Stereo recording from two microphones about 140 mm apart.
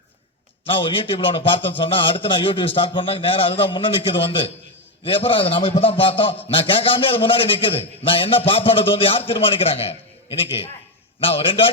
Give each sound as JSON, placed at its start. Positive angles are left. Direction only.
{"t": 0.6, "sound": "a man's voice", "side_deg": 40}